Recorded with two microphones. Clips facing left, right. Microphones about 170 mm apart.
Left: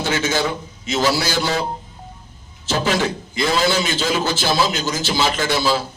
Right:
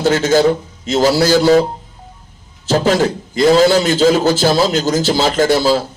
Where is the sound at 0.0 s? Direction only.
40° right (ahead or behind).